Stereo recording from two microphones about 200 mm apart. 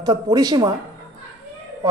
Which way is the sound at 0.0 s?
20° right (ahead or behind).